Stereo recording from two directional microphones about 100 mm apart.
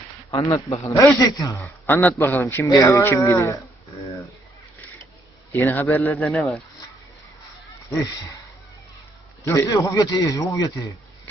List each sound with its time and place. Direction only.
0.3 s a man's voice: 30° left (ahead or behind)
1.6 s a man's voice: 20° left (ahead or behind)
5.5 s a man's voice: 20° left (ahead or behind)
6.2 s speech: 5° left (ahead or behind)
9.4 s a man's voice: 30° left (ahead or behind)